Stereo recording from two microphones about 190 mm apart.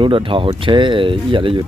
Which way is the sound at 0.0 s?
25° right (ahead or behind).